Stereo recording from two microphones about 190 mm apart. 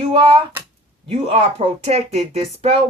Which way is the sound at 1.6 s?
35° right (ahead or behind).